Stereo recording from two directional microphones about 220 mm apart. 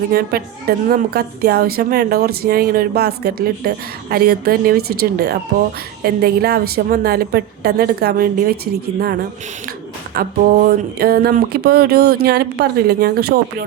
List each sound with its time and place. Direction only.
0.1 s a woman's voice: 45° right (ahead or behind)
10.2 s a woman's voice: 45° right (ahead or behind)